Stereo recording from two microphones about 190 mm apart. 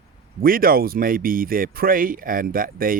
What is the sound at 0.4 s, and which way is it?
Speech, 50° right (ahead or behind).